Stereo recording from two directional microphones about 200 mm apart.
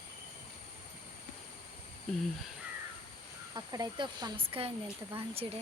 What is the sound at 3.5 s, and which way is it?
Speech, 20° right (ahead or behind).